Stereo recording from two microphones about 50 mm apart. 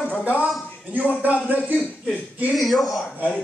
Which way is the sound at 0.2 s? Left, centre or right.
Right.